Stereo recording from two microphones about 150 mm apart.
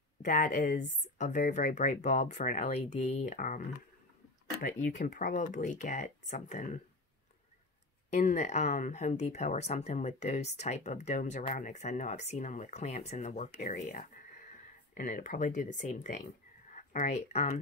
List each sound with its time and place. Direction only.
0.2 s speech: 60° left (ahead or behind)
3.3 s speech: 60° left (ahead or behind)
8.1 s speech: 50° left (ahead or behind)